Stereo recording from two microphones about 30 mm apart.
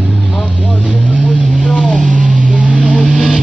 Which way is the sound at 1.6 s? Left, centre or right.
Right.